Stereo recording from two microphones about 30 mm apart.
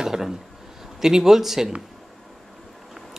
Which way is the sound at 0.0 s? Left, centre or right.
Centre.